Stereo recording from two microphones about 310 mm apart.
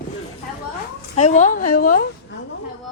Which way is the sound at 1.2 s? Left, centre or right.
Left.